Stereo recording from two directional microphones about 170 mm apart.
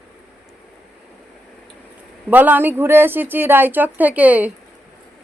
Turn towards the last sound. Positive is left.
turn(degrees=-10)  # may be behind; listen again after turning